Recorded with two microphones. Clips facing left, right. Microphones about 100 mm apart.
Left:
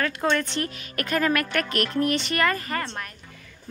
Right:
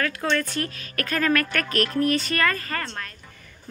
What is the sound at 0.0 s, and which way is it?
A woman's voice, 20° left (ahead or behind).